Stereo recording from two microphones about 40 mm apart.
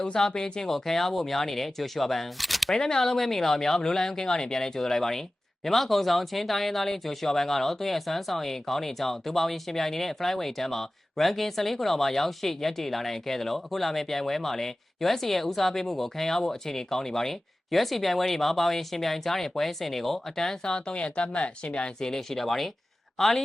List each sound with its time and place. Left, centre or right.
0.0 s speech: centre
2.7 s speech: centre
20.7 s speech: left
22.0 s speech: centre